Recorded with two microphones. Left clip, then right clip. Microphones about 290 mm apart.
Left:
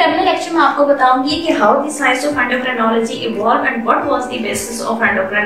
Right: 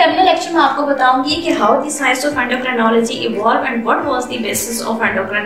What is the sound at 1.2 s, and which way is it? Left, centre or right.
A woman's voice, right.